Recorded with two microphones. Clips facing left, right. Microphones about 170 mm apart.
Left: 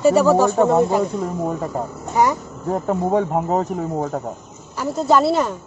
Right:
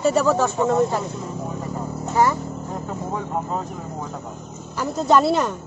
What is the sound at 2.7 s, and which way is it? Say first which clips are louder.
Speech: left 12 dB; 65° left (ahead or behind).